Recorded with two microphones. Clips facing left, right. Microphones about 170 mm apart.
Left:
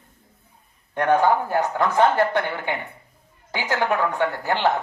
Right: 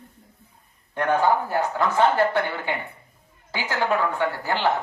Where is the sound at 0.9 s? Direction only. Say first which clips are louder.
Left 2 dB; 20° left (ahead or behind).